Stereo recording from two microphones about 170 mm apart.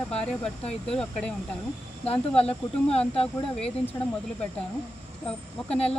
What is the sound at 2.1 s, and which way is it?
Speech, 35° left (ahead or behind).